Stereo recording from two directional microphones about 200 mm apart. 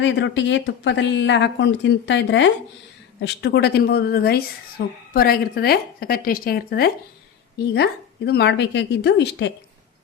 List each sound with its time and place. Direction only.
0.0 s a woman's voice: 65° left (ahead or behind)